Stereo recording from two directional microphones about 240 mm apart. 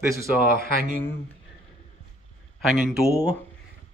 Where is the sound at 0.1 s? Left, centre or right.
Centre.